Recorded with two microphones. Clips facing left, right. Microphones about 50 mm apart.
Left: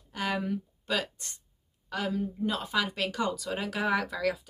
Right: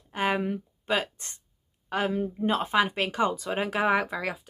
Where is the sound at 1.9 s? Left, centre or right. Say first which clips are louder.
Right 4 dB; right.